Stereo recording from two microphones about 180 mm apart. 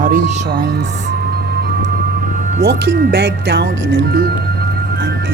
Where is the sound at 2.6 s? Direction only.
60° right (ahead or behind).